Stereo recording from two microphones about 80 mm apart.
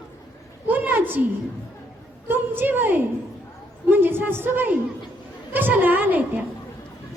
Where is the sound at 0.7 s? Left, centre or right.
Right.